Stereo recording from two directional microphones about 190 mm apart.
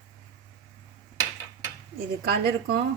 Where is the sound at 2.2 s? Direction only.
55° right (ahead or behind).